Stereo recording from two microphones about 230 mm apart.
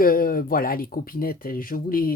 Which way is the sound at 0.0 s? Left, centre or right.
Left.